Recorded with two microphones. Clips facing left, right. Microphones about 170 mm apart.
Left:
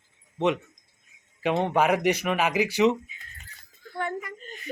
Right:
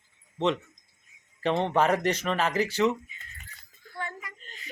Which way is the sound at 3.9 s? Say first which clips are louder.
Left 7 dB; 55° left (ahead or behind).